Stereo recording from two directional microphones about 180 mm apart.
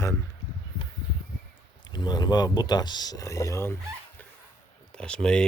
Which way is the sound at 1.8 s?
25° left (ahead or behind).